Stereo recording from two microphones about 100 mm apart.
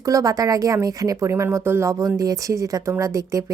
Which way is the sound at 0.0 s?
35° right (ahead or behind).